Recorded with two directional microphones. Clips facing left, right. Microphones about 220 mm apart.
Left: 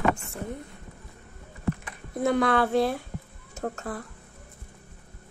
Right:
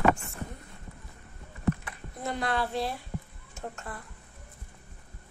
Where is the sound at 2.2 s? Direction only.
55° left (ahead or behind).